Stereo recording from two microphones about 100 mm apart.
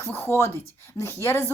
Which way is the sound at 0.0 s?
25° left (ahead or behind).